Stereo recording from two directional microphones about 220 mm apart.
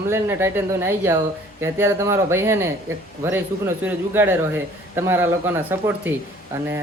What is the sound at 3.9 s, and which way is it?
Speech, 10° right (ahead or behind).